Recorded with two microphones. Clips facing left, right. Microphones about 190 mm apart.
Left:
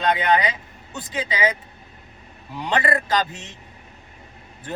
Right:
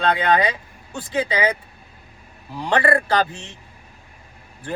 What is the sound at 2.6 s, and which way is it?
Speech, 20° left (ahead or behind).